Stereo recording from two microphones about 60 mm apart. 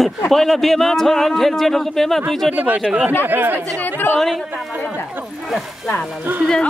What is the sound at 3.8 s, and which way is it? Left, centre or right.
Speech, left.